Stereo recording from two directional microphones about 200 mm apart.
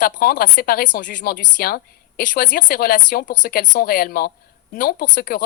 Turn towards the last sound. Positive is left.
turn(degrees=45)  # may be behind; listen again after turning